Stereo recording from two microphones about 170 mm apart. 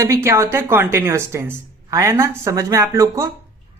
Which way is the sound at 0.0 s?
15° right (ahead or behind).